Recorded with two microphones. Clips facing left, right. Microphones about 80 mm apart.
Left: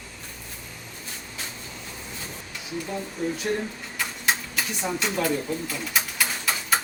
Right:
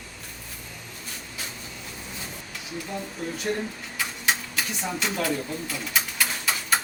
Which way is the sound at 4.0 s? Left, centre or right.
Centre.